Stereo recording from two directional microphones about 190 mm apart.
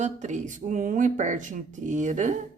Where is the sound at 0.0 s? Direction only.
40° right (ahead or behind).